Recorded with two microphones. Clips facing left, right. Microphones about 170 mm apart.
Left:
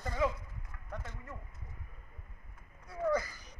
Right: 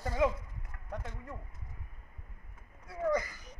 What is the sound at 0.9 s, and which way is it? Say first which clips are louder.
Speech: right 3 dB; 15° right (ahead or behind).